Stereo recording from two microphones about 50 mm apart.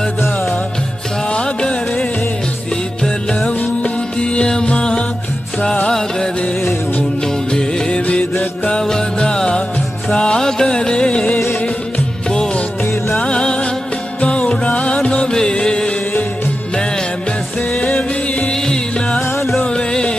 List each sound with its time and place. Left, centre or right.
1.3 s music: centre
3.4 s music: left
7.5 s music: left
17.7 s music: left
18.7 s music: centre